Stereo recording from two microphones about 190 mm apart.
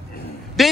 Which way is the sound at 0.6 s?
Centre (ahead or behind).